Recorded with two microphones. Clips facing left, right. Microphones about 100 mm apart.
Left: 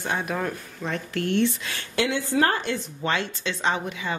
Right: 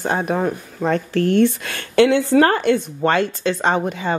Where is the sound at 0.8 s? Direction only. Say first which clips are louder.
Right 11 dB; 40° right (ahead or behind).